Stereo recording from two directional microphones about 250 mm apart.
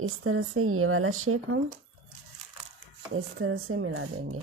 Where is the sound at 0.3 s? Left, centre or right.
Right.